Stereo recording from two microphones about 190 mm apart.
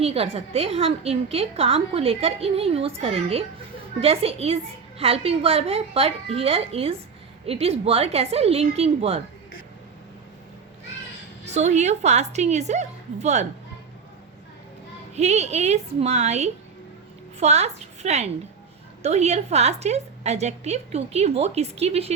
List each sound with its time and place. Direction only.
0.0 s a woman's voice: 30° right (ahead or behind)
11.4 s a woman's voice: 35° right (ahead or behind)
15.1 s a woman's voice: 35° right (ahead or behind)